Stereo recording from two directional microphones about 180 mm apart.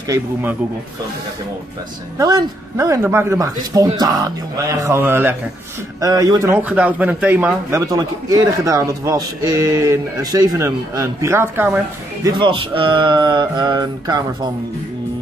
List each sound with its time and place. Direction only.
0.1 s speech: 10° right (ahead or behind)
2.1 s a man's voice: 20° right (ahead or behind)